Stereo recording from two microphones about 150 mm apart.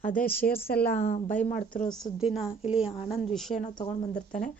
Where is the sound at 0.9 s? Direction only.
45° left (ahead or behind).